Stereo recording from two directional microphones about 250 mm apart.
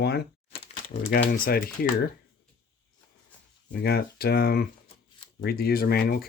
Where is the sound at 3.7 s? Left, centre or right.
Left.